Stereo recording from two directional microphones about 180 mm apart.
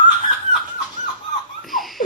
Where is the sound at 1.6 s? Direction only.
Centre (ahead or behind).